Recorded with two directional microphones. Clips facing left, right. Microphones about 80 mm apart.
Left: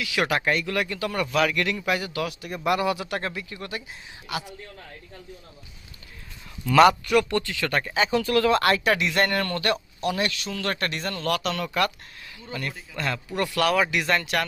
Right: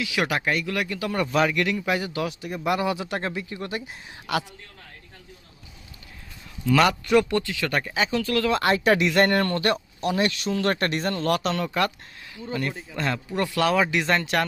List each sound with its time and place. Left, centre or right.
0.0 s speech: centre
1.5 s speech: centre; by 3.8 s right
4.3 s a man's voice: right
6.7 s speech: centre
7.0 s speech: right; by 8.1 s centre
8.1 s speech: centre
8.6 s speech: right